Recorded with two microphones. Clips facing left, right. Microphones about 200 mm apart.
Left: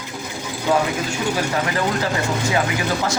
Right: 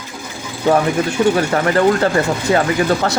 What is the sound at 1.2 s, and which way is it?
Speech, 60° right (ahead or behind).